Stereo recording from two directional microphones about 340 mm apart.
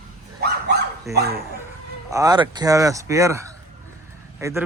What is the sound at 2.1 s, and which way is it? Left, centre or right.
Speech, centre.